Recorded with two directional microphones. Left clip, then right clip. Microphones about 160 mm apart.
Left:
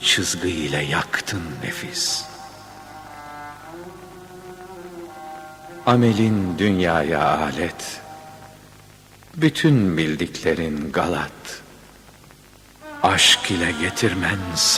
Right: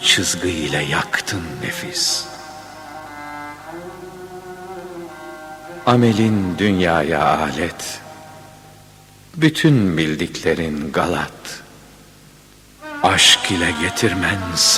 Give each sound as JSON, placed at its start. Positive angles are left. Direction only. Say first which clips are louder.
{"t": 0.0, "sound": "speech", "louder": "right 3 dB", "side_deg": 10}
{"t": 3.2, "sound": "music", "louder": "right 4 dB", "side_deg": 35}
{"t": 5.8, "sound": "speech", "louder": "right 2 dB", "side_deg": 10}
{"t": 9.4, "sound": "speech", "louder": "right 3 dB", "side_deg": 10}
{"t": 13.0, "sound": "speech", "louder": "right 3 dB", "side_deg": 10}